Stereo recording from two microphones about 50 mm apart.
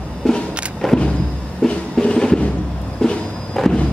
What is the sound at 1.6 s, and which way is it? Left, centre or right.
Music, centre.